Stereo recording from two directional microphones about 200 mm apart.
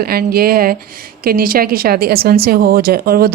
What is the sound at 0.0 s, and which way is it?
Speech, 50° right (ahead or behind).